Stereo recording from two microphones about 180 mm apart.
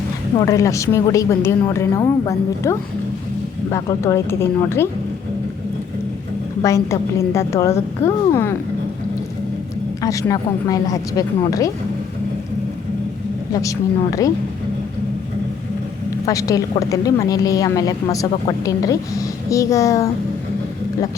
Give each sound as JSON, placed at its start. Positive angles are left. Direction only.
{"t": 0.3, "sound": "a woman's voice", "side_deg": 20}
{"t": 6.6, "sound": "a woman's voice", "side_deg": 15}
{"t": 10.0, "sound": "a woman's voice", "side_deg": 20}
{"t": 13.5, "sound": "a woman's voice", "side_deg": 20}
{"t": 16.2, "sound": "a woman's voice", "side_deg": 20}